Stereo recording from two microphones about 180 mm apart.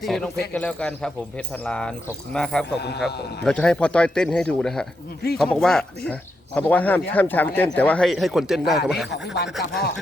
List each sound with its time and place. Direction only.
0.0 s speech: centre (ahead or behind)
9.1 s speech: 70° left (ahead or behind)